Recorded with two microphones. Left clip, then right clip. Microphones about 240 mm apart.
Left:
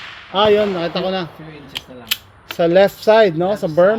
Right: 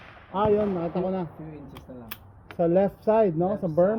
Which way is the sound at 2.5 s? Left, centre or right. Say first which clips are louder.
Left 10 dB; left.